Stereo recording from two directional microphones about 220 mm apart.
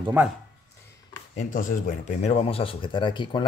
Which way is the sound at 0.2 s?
10° right (ahead or behind).